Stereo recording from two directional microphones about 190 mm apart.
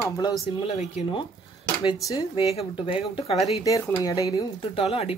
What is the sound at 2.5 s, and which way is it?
Speech, 30° left (ahead or behind).